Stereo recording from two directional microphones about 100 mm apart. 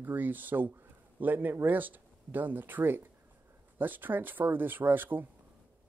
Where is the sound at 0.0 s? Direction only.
20° right (ahead or behind).